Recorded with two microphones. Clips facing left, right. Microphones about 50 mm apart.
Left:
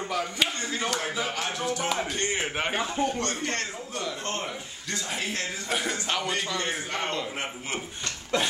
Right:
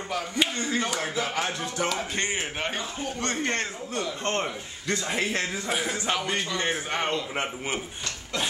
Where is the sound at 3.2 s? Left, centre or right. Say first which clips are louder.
Right 2 dB; right.